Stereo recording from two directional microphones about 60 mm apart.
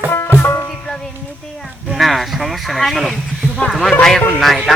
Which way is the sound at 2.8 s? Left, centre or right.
Centre.